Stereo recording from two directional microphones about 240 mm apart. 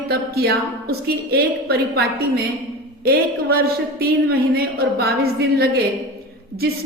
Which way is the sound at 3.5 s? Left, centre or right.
Right.